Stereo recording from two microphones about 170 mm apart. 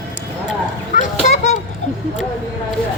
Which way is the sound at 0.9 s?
45° left (ahead or behind).